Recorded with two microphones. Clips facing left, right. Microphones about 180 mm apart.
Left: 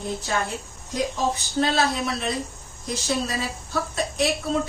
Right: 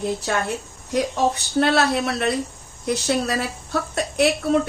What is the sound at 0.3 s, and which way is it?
A woman's voice, 65° right (ahead or behind).